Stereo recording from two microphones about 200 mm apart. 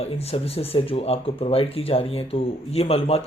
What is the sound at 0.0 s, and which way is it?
Speech, 30° left (ahead or behind).